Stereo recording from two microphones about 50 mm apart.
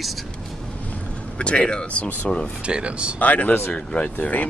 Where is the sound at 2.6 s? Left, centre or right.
Right.